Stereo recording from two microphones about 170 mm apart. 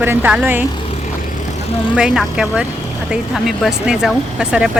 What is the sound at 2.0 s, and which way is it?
A woman's voice, 5° right (ahead or behind).